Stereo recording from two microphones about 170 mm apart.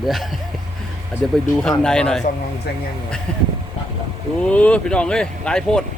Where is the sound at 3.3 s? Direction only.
5° left (ahead or behind).